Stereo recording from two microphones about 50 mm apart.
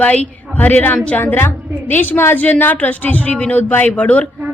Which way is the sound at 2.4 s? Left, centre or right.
Left.